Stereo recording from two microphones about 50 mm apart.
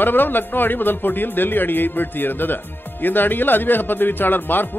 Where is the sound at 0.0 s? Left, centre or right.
Left.